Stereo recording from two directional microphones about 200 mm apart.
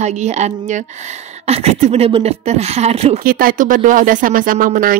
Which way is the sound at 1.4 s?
30° right (ahead or behind).